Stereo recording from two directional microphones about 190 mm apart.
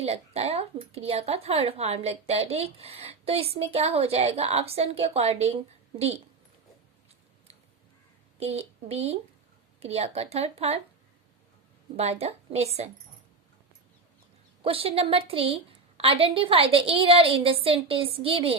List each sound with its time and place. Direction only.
0.0 s speech: 35° right (ahead or behind)
8.4 s speech: 30° right (ahead or behind)
11.9 s speech: 35° right (ahead or behind)
14.6 s a woman's voice: 30° right (ahead or behind)